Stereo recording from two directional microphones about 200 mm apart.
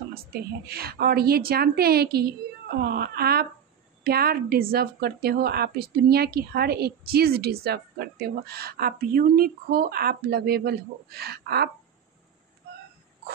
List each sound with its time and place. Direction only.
0.1 s a woman's voice: 50° right (ahead or behind)